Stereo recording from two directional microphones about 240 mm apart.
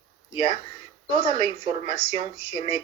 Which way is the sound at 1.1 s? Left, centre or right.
Centre.